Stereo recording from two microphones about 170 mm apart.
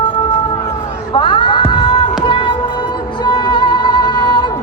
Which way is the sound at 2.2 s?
30° left (ahead or behind).